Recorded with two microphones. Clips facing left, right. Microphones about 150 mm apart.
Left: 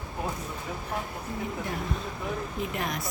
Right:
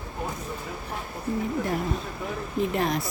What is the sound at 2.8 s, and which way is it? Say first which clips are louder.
Speech: right 6 dB; 30° right (ahead or behind).